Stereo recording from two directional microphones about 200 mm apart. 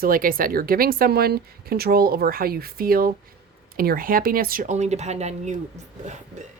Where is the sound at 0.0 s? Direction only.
45° right (ahead or behind).